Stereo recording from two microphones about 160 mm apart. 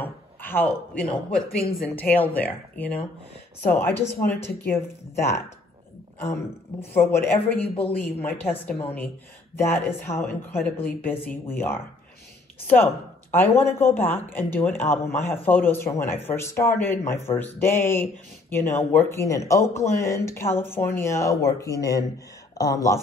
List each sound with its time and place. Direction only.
0.0 s speech: 10° left (ahead or behind)
6.8 s speech: 15° left (ahead or behind)
7.6 s a man's voice: 35° left (ahead or behind)
8.0 s speech: 10° left (ahead or behind)